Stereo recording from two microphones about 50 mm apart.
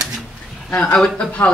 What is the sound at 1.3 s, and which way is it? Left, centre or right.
Speech, left.